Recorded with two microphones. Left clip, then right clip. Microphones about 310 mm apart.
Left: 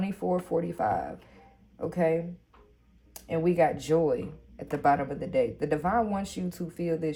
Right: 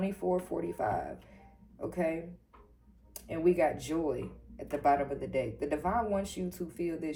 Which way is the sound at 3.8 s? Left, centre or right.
Left.